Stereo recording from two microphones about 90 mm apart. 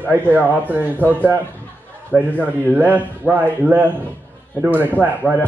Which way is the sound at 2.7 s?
20° right (ahead or behind).